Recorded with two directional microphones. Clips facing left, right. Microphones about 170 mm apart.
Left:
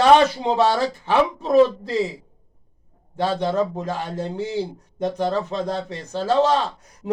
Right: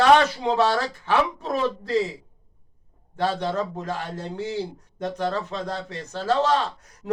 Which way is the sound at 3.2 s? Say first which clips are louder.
Left 4 dB; 15° left (ahead or behind).